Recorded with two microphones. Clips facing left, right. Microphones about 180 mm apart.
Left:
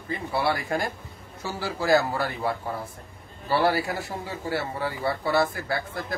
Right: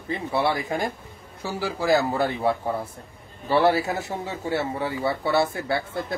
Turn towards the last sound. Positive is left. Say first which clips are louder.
# right 3 dB
turn(degrees=-25)  # may be behind; listen again after turning